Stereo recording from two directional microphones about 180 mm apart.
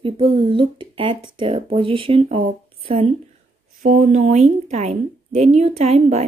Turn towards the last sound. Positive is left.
turn(degrees=-35)  # may be behind; listen again after turning